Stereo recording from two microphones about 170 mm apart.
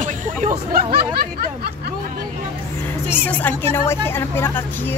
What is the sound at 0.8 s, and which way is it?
Speech, 65° right (ahead or behind).